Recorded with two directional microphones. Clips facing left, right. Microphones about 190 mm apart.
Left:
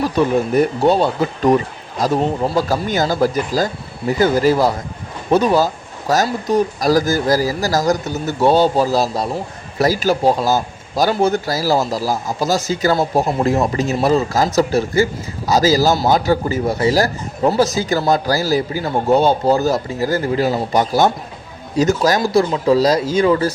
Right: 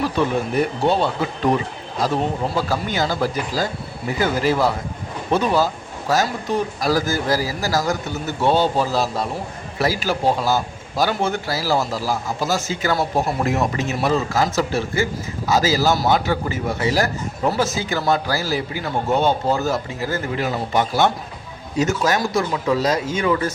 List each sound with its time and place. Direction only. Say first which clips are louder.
0.2 s speech: left 6 dB; 40° left (ahead or behind)